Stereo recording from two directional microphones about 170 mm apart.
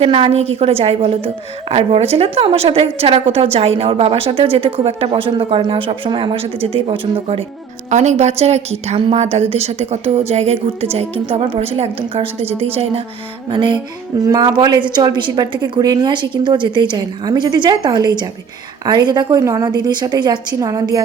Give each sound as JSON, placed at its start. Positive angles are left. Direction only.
{"t": 0.0, "sound": "a woman's voice", "side_deg": -35}